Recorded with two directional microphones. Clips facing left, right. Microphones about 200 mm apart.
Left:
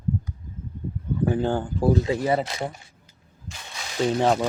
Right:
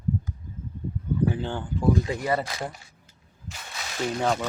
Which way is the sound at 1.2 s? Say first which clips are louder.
Left 5 dB; 45° left (ahead or behind).